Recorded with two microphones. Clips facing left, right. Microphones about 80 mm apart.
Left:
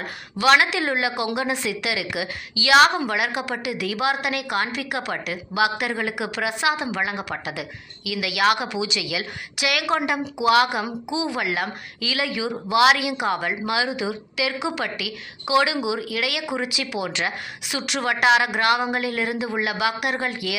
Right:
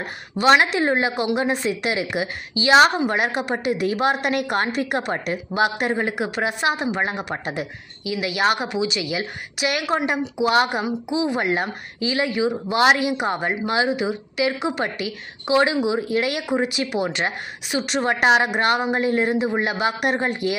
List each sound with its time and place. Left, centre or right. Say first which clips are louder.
0.4 s a woman's voice: right 2 dB; right